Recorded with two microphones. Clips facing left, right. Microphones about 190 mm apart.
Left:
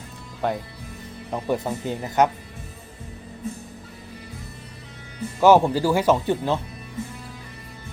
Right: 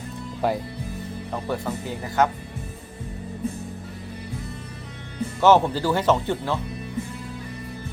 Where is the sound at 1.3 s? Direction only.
15° left (ahead or behind).